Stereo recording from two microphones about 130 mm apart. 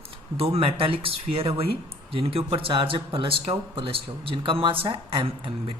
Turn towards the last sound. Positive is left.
turn(degrees=-40)  # may be behind; listen again after turning